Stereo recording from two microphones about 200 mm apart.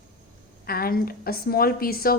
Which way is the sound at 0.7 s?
50° left (ahead or behind).